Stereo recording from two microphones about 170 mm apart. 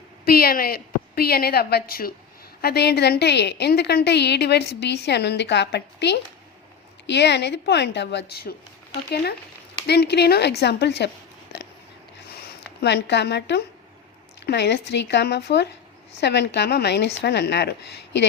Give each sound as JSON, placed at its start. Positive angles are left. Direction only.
{"t": 0.3, "sound": "a woman's voice", "side_deg": 60}
{"t": 12.8, "sound": "a woman's voice", "side_deg": 90}
{"t": 16.2, "sound": "a woman's voice", "side_deg": 85}